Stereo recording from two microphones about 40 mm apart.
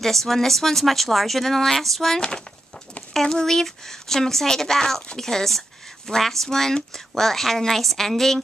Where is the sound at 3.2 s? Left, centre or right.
Centre.